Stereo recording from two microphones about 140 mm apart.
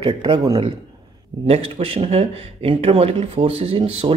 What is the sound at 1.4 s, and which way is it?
Speech, 45° right (ahead or behind).